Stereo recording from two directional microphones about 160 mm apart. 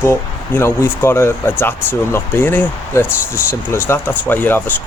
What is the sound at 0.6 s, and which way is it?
Speech, 15° left (ahead or behind).